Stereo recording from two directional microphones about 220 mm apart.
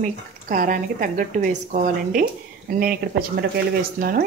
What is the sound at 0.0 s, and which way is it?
Speech, 35° right (ahead or behind).